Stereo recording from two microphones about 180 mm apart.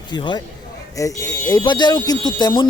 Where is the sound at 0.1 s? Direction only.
25° left (ahead or behind).